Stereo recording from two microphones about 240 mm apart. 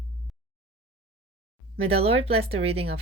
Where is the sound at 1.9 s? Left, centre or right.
Right.